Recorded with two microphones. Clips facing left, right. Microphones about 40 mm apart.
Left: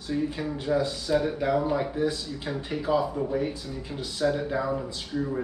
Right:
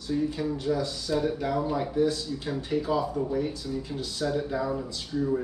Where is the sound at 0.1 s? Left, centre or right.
Left.